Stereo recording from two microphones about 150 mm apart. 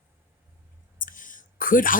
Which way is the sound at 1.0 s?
60° left (ahead or behind).